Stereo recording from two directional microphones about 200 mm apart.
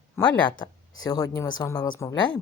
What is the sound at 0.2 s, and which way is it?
Speech, 15° left (ahead or behind).